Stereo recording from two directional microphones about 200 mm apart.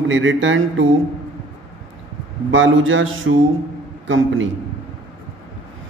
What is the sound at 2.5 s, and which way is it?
A man's voice, 75° right (ahead or behind).